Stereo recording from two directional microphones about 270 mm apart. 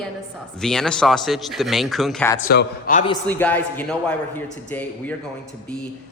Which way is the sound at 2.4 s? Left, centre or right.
Left.